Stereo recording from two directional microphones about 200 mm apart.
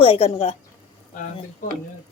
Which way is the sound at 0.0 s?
30° left (ahead or behind).